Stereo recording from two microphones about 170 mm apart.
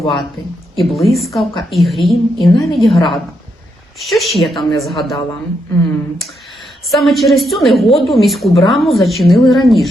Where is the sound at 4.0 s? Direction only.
Centre (ahead or behind).